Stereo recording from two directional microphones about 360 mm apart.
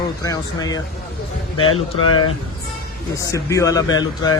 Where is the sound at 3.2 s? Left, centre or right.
Centre.